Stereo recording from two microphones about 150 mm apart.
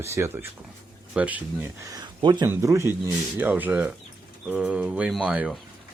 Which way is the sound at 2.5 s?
20° right (ahead or behind).